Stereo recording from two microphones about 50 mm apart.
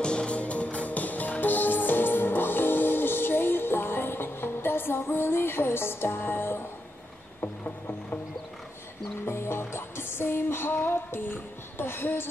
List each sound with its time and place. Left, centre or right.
0.0 s music: centre; by 6.6 s left
9.2 s music: left